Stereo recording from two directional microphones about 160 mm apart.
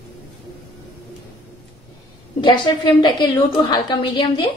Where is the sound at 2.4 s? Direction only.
30° left (ahead or behind).